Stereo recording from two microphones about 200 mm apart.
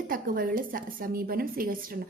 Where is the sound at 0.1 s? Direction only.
45° right (ahead or behind).